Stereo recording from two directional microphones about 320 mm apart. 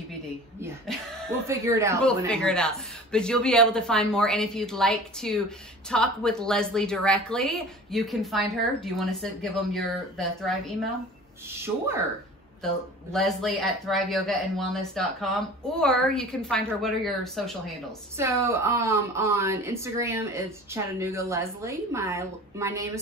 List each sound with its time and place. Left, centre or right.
0.6 s speech: centre
2.0 s a woman's voice: centre
13.1 s speech: centre